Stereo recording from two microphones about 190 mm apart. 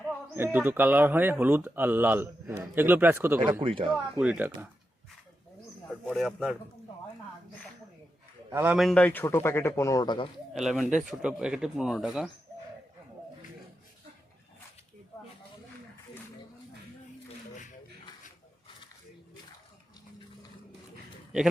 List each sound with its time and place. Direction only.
0.3 s speech: 10° right (ahead or behind)
3.6 s speech: 25° right (ahead or behind)
3.9 s speech: 5° right (ahead or behind)
6.1 s speech: centre (ahead or behind)
8.4 s a man's voice: 10° right (ahead or behind); by 10.2 s 20° left (ahead or behind)
10.5 s speech: centre (ahead or behind)